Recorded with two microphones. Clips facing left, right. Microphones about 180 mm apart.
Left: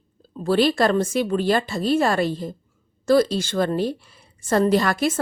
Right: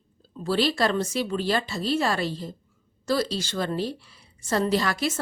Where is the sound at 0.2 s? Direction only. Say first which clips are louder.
Left 5 dB; 50° left (ahead or behind).